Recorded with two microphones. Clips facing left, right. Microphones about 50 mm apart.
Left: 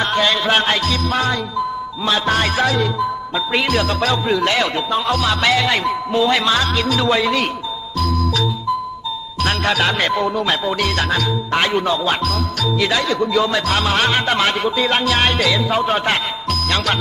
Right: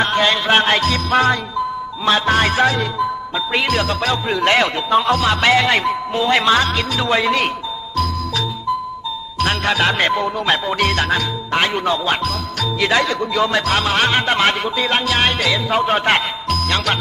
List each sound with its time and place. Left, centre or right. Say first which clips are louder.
0.0 s music: right 1 dB; right
0.7 s music: right 2 dB; right
3.3 s speech: left 1 dB; centre
4.3 s music: right 1 dB; right
9.4 s speech: right 1 dB; centre
10.3 s music: right 1 dB; right
10.9 s music: even; centre
11.7 s music: left 1 dB; right
12.1 s speech: even; centre
12.5 s music: right 3 dB; right
14.8 s speech: right 1 dB; centre
15.7 s music: right 2 dB; right
16.6 s speech: left 1 dB; centre